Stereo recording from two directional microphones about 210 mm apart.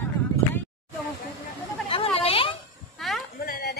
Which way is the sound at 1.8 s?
25° left (ahead or behind).